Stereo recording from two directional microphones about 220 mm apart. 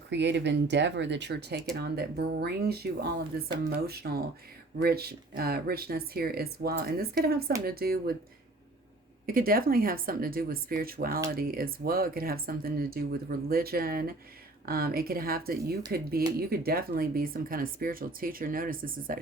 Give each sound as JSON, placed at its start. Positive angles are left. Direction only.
{"t": 0.1, "sound": "speech", "side_deg": -55}
{"t": 9.2, "sound": "speech", "side_deg": -40}